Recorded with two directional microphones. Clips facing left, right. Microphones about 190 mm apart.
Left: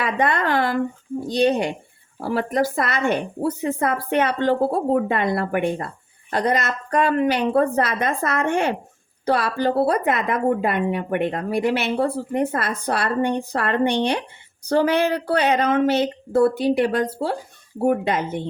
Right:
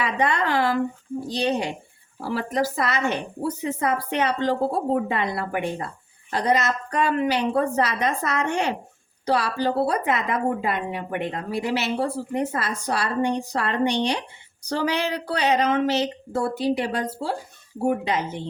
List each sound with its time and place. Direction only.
0.0 s a woman's voice: 55° left (ahead or behind)